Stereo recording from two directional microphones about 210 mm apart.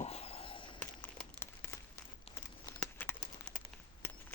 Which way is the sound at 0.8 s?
5° left (ahead or behind).